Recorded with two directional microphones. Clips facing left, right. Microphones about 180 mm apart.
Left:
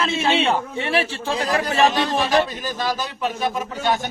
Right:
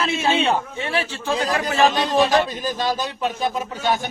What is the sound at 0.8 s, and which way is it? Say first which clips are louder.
Speech: left 2 dB; 30° left (ahead or behind).